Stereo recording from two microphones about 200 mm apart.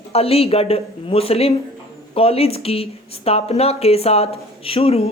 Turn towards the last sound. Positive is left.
turn(degrees=30)  # may be behind; listen again after turning